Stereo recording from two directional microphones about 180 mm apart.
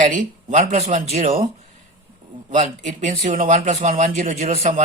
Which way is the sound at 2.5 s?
45° right (ahead or behind).